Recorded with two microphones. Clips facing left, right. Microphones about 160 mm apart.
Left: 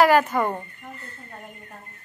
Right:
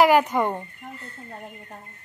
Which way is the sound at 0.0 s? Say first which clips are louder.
Even; 15° right (ahead or behind).